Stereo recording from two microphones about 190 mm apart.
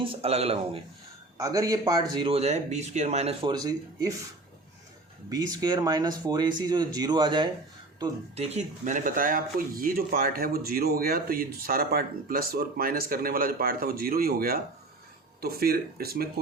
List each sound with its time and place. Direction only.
0.0 s speech: 35° right (ahead or behind)
1.4 s speech: 20° right (ahead or behind)
2.3 s speech: 35° right (ahead or behind)
3.5 s speech: 20° right (ahead or behind)
5.3 s speech: 20° right (ahead or behind)
8.4 s speech: 35° right (ahead or behind); by 16.3 s 55° right (ahead or behind)